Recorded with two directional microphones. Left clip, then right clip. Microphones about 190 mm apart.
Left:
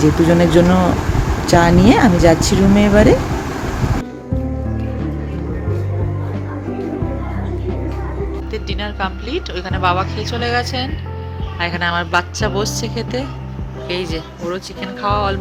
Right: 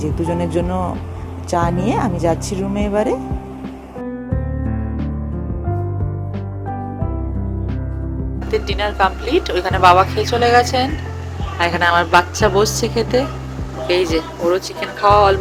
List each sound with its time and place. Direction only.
0.0 s speech: 25° right (ahead or behind)
8.5 s speech: 5° right (ahead or behind)
11.6 s a woman's voice: 5° left (ahead or behind)